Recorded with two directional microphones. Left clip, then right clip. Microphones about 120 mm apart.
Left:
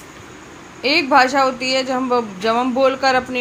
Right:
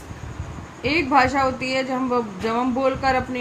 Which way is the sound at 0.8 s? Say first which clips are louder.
Left 4 dB; 30° left (ahead or behind).